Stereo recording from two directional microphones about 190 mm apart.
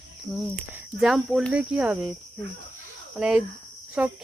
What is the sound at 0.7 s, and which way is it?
Speech, 5° right (ahead or behind).